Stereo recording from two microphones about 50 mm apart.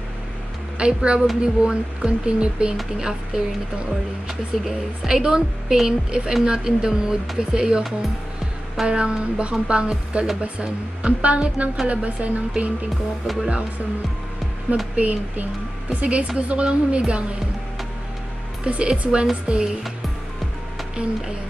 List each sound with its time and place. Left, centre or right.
0.7 s music: right
3.0 s speech: centre
8.8 s music: centre
15.0 s music: right
18.6 s music: right